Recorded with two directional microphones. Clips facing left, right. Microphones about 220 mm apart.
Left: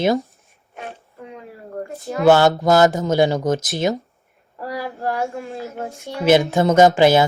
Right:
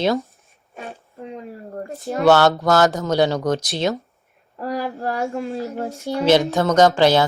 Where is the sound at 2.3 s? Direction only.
15° left (ahead or behind).